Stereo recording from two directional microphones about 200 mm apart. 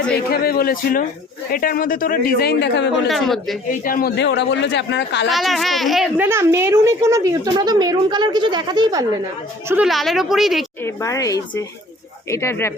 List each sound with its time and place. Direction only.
0.1 s speech: 50° left (ahead or behind)
2.9 s speech: centre (ahead or behind)
3.8 s speech: 45° left (ahead or behind)
5.3 s speech: centre (ahead or behind)
6.2 s a woman's voice: 15° right (ahead or behind)
9.6 s speech: 5° right (ahead or behind)
10.8 s a woman's voice: 15° left (ahead or behind)